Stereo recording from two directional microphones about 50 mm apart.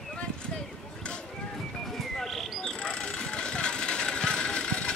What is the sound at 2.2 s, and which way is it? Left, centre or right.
Vehicle, centre.